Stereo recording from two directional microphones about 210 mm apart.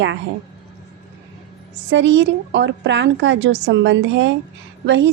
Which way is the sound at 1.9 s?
60° right (ahead or behind).